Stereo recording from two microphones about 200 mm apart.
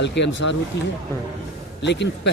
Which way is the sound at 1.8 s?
60° left (ahead or behind).